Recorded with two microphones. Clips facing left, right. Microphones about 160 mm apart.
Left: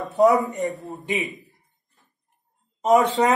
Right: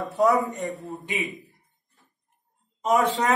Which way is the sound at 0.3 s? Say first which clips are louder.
Left 2 dB; centre (ahead or behind).